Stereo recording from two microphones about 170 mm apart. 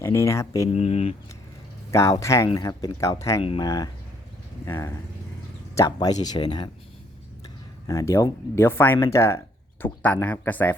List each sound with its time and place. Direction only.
0.0 s speech: 15° left (ahead or behind)
0.7 s speech: 40° left (ahead or behind)
1.9 s speech: 20° left (ahead or behind)
7.9 s speech: 15° left (ahead or behind)